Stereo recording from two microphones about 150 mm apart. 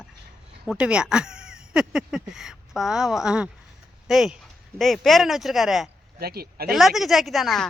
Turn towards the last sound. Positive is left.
turn(degrees=0)  # may be behind; listen again after turning